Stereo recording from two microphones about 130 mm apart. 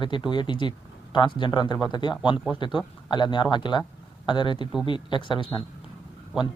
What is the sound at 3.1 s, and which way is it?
Speech, 35° left (ahead or behind).